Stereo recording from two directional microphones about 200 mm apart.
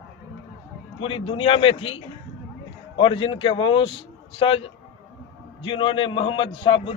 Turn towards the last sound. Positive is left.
turn(degrees=25)  # may be behind; listen again after turning